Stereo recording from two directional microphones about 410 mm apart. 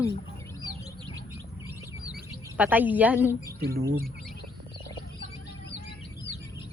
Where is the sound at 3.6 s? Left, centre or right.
Right.